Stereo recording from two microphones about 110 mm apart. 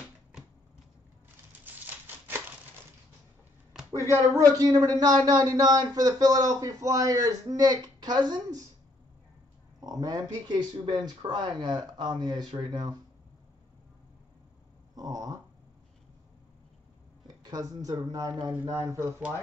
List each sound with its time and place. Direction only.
1.6 s a sound: 15° right (ahead or behind)
4.1 s speech: 35° right (ahead or behind)
9.8 s speech: 35° right (ahead or behind)
15.0 s speech: 35° right (ahead or behind)
17.3 s speech: 35° right (ahead or behind)
18.5 s speech: 10° right (ahead or behind)
18.9 s speech: 25° right (ahead or behind)